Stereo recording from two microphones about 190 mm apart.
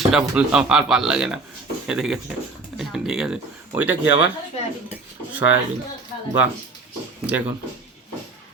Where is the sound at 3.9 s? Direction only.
75° left (ahead or behind).